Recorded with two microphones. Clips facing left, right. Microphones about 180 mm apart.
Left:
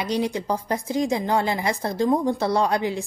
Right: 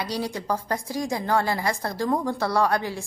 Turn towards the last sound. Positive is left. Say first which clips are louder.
# left 2 dB
turn(degrees=20)  # may be behind; listen again after turning